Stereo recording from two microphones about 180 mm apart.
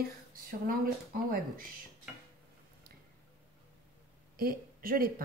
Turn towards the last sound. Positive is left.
turn(degrees=-55)  # may be behind; listen again after turning